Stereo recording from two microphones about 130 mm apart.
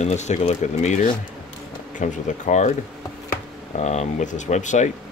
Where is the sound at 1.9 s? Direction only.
75° left (ahead or behind).